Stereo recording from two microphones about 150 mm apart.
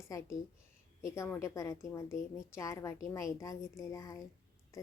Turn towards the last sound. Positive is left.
turn(degrees=25)  # may be behind; listen again after turning